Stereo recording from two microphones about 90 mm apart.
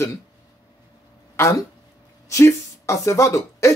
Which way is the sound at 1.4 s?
40° left (ahead or behind).